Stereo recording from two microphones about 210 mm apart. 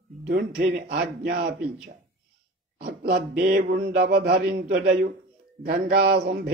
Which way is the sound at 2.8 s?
50° right (ahead or behind).